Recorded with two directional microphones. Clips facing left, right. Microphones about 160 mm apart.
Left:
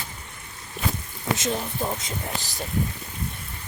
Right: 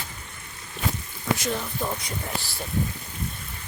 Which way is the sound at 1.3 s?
20° left (ahead or behind).